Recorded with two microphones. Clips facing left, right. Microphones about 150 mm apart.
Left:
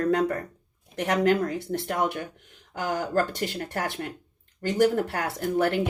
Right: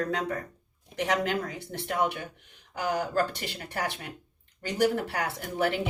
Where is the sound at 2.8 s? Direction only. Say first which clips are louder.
Left 2 dB; 45° left (ahead or behind).